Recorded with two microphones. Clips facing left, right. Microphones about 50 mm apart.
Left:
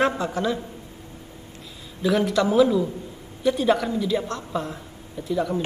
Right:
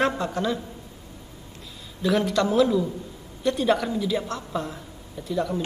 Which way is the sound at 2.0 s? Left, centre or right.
Centre.